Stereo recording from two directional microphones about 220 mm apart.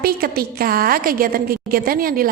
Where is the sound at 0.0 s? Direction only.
45° right (ahead or behind).